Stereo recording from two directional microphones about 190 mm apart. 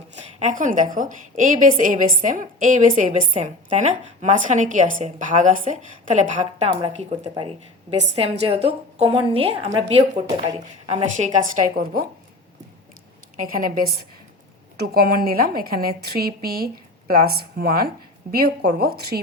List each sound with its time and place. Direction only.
0.3 s a woman's voice: 40° right (ahead or behind)
13.3 s speech: 45° right (ahead or behind)